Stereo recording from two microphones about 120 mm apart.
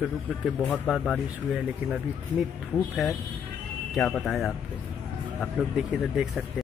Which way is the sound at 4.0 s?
5° left (ahead or behind).